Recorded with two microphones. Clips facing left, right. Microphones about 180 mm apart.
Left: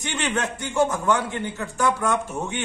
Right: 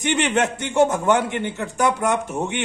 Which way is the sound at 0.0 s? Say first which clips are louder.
Right 6 dB; 20° right (ahead or behind).